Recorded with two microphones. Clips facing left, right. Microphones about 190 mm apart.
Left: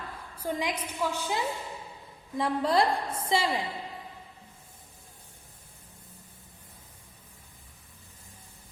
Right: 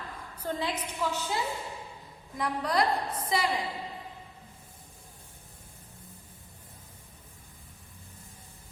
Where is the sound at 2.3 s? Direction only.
25° left (ahead or behind).